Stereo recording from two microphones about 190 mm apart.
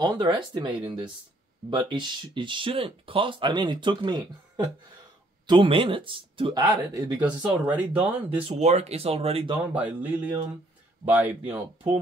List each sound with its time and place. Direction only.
0.0 s speech: 20° right (ahead or behind)
7.6 s speech: 10° right (ahead or behind)
8.4 s speech: 30° right (ahead or behind)
9.8 s speech: 10° right (ahead or behind)